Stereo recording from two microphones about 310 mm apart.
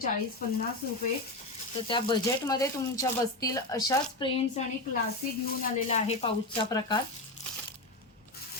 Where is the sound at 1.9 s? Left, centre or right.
Centre.